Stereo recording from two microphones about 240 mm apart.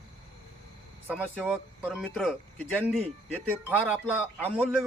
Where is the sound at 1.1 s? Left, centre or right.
Centre.